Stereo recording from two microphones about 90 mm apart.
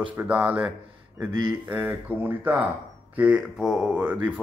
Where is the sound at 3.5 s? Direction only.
5° right (ahead or behind).